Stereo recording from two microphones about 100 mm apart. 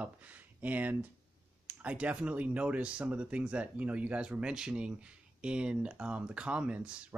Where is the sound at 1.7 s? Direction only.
15° right (ahead or behind).